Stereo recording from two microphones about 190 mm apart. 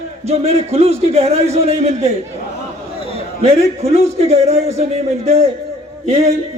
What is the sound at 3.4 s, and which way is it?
A man's voice, 35° right (ahead or behind).